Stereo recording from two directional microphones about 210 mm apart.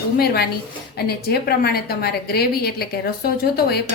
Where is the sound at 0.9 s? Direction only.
45° left (ahead or behind).